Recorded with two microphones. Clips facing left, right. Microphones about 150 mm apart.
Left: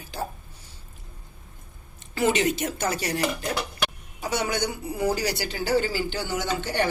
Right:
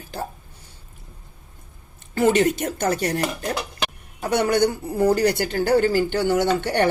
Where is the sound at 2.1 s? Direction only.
50° right (ahead or behind).